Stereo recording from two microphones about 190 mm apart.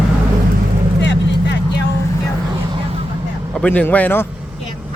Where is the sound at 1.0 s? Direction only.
70° left (ahead or behind).